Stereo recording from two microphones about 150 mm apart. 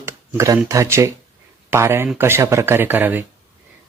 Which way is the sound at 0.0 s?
20° right (ahead or behind).